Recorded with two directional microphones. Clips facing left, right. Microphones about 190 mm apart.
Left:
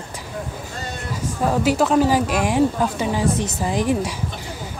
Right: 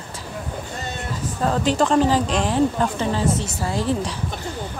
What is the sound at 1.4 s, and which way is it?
A woman's voice, 10° left (ahead or behind).